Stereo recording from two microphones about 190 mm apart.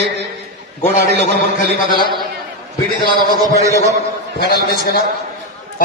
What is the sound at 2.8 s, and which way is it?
Speech, 50° right (ahead or behind).